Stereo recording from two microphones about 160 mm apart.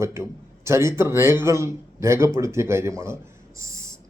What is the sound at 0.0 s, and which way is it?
Speech, 15° right (ahead or behind).